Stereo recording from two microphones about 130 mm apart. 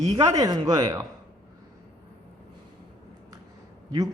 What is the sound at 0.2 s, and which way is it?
Speech, 30° right (ahead or behind).